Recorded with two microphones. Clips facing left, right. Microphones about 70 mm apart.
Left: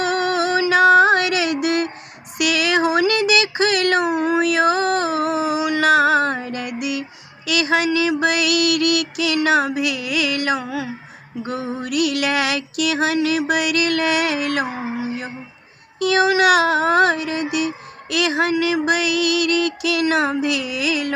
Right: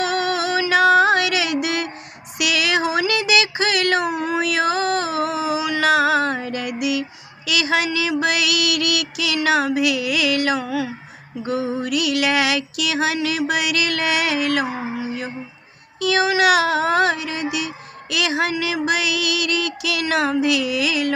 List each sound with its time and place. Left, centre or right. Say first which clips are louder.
0.0 s music: left 2 dB; left
2.4 s a sound: left 2 dB; left
7.4 s music: left 2 dB; left